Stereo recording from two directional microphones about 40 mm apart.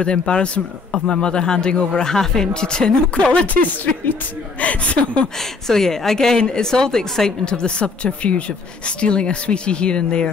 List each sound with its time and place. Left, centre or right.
0.0 s a woman's voice: left
0.9 s a man's voice: centre
3.4 s speech: left
4.6 s speech: left
5.4 s a woman's voice: centre